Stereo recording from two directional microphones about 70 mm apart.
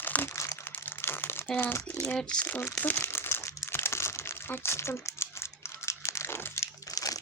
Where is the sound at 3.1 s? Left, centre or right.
Left.